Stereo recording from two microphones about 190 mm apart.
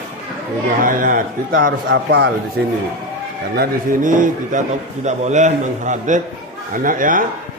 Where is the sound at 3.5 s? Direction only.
45° right (ahead or behind).